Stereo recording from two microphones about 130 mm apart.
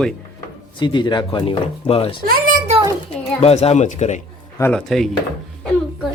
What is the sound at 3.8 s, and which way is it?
Speech, 65° left (ahead or behind).